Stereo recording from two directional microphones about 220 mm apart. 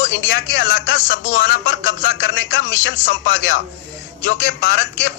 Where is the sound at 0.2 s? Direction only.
55° left (ahead or behind).